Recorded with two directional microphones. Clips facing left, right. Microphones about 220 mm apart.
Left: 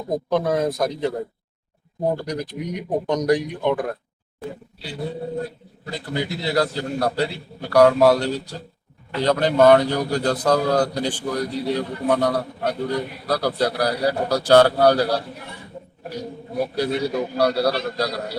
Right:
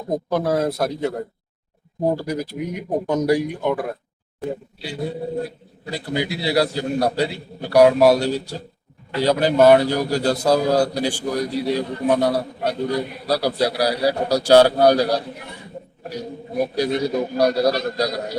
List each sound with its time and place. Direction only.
0.3 s a man's voice: 5° right (ahead or behind)
2.1 s a man's voice: 5° right (ahead or behind)
16.6 s a man's voice: 15° right (ahead or behind)
17.7 s a man's voice: 40° right (ahead or behind)
17.9 s a man's voice: 15° right (ahead or behind)